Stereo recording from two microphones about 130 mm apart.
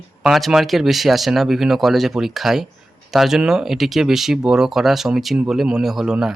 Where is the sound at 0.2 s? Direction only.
Centre (ahead or behind).